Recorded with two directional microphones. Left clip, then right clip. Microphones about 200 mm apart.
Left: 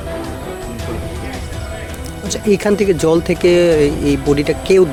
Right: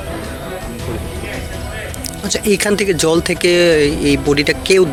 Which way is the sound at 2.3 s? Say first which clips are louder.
Even; centre (ahead or behind).